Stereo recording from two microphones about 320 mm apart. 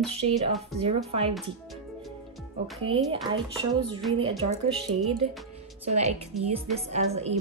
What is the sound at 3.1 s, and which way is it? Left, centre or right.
Speech, centre.